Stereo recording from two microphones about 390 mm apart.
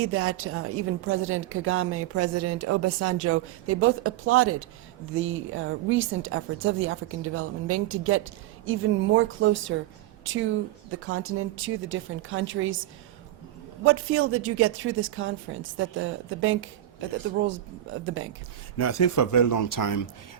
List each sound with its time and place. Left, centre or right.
0.0 s a woman's voice: right
18.8 s speech: left